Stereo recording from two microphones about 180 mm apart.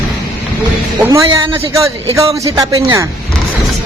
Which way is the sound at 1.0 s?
15° right (ahead or behind).